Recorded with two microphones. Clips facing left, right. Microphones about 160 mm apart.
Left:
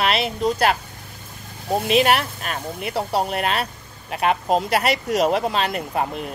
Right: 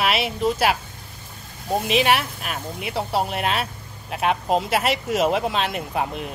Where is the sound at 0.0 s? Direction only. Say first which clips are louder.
Left 1 dB; 5° right (ahead or behind).